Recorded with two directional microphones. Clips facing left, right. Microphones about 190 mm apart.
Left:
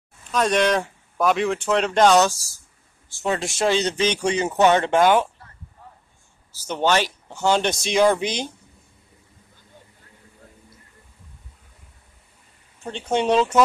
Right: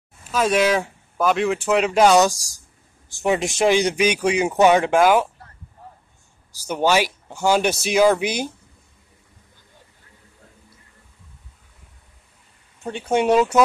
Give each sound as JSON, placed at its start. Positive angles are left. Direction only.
{"t": 0.2, "sound": "speech", "side_deg": -5}
{"t": 6.5, "sound": "speech", "side_deg": -10}
{"t": 12.8, "sound": "speech", "side_deg": -10}